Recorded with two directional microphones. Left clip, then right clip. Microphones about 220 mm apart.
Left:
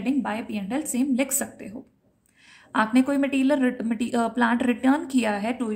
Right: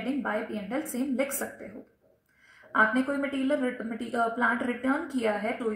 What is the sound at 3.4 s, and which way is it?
A woman's voice, 55° left (ahead or behind).